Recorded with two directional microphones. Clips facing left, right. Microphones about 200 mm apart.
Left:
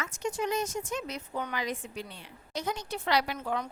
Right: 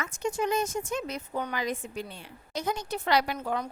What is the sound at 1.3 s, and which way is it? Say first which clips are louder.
A woman's voice: right 2 dB; 40° right (ahead or behind).